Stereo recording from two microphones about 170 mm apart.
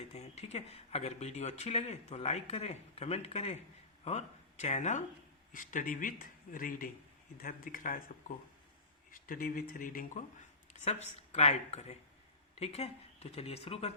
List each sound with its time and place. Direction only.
0.1 s speech: 40° left (ahead or behind); by 8.1 s 55° left (ahead or behind)
9.2 s speech: 55° left (ahead or behind)
10.8 s speech: 40° left (ahead or behind)